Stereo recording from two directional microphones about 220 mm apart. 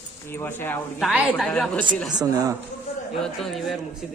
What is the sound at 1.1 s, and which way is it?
Speech, centre (ahead or behind).